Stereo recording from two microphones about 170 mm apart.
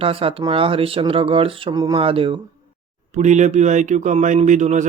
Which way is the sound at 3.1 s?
45° right (ahead or behind).